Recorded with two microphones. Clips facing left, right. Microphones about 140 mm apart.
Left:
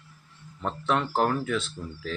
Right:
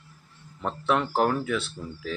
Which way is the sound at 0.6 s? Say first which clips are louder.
Right 1 dB; 5° right (ahead or behind).